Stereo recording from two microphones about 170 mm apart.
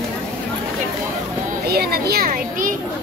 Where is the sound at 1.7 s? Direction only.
65° right (ahead or behind).